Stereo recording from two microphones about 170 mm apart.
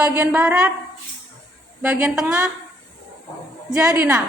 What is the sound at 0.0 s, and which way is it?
Speech, 10° right (ahead or behind).